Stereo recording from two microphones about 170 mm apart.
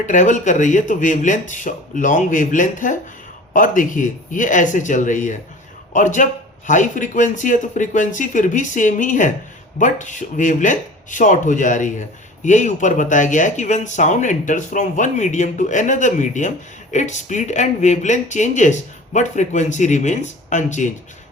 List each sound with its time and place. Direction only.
0.0 s speech: 50° left (ahead or behind)